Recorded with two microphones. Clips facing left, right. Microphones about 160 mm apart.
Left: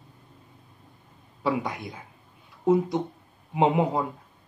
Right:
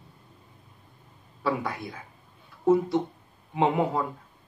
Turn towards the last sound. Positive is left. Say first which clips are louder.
# left 2 dB
turn(degrees=15)  # may be behind; listen again after turning